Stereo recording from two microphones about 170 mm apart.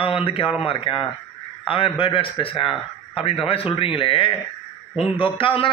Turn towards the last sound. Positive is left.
turn(degrees=30)  # may be behind; listen again after turning